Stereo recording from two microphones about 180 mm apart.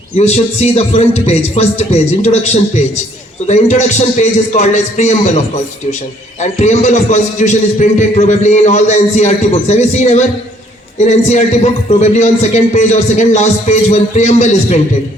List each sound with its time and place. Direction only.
0.2 s a man's voice: 35° left (ahead or behind)
6.4 s a man's voice: 40° left (ahead or behind)